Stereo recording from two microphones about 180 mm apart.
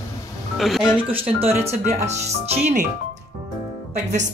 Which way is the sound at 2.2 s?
40° right (ahead or behind).